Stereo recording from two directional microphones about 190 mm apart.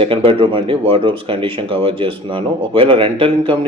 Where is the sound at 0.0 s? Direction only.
30° right (ahead or behind).